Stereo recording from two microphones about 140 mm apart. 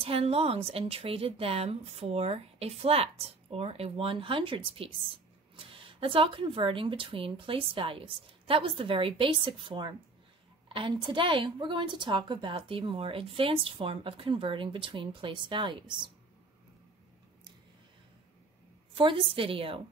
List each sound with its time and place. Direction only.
0.0 s a woman's voice: 45° right (ahead or behind)
18.9 s a woman's voice: 40° right (ahead or behind)